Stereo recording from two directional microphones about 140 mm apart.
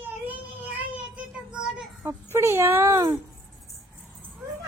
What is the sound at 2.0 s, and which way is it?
Speech, 15° right (ahead or behind).